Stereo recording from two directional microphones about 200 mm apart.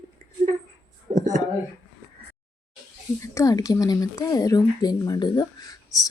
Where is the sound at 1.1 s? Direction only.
40° right (ahead or behind).